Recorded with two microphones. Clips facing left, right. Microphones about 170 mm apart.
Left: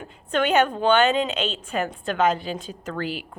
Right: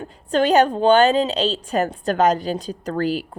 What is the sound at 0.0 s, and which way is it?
A woman's voice, 35° right (ahead or behind).